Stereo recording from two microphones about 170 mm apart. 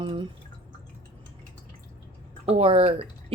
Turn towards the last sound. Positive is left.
turn(degrees=-35)  # may be behind; listen again after turning